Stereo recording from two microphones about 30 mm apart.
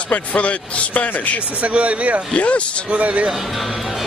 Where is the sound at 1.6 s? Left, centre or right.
Right.